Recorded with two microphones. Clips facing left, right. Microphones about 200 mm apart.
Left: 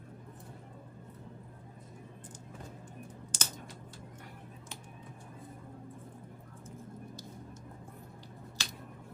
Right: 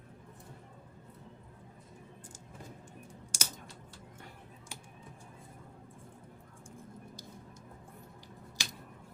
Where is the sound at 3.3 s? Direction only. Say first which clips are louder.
Even; 10° right (ahead or behind).